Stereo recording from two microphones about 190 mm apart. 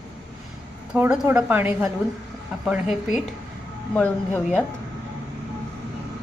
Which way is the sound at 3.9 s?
10° left (ahead or behind).